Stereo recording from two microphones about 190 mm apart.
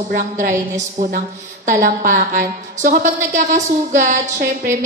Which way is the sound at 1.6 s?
45° right (ahead or behind).